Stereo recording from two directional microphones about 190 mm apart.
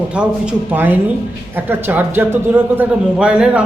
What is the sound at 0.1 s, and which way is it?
A man's voice, 5° right (ahead or behind).